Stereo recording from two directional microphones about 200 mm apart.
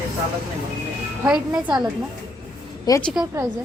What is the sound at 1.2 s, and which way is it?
Speech, 5° right (ahead or behind).